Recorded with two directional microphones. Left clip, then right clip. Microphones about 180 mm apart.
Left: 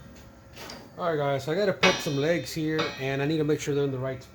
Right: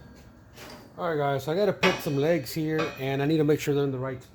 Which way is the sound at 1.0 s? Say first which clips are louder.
Even; 35° right (ahead or behind).